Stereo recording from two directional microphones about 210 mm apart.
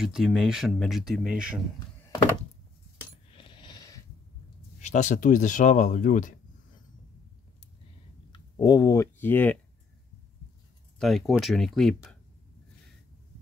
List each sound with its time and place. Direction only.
0.0 s speech: centre (ahead or behind)
3.3 s coin: 25° left (ahead or behind)
4.8 s speech: 35° left (ahead or behind)
8.3 s speech: 20° left (ahead or behind)
11.0 s speech: centre (ahead or behind)